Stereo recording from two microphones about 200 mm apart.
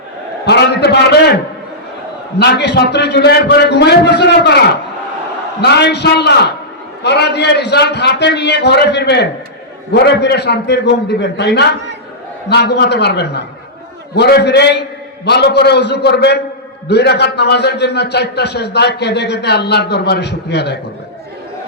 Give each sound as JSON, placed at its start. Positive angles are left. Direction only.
{"t": 0.4, "sound": "a man's voice", "side_deg": 55}
{"t": 2.4, "sound": "a man's voice", "side_deg": 55}